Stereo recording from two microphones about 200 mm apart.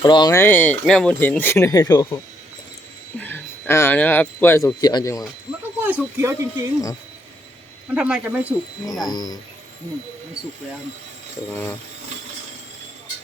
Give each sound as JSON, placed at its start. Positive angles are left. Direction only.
{"t": 0.0, "sound": "speech", "side_deg": 20}
{"t": 5.8, "sound": "speech", "side_deg": -10}
{"t": 7.9, "sound": "speech", "side_deg": -5}
{"t": 9.0, "sound": "speech", "side_deg": 20}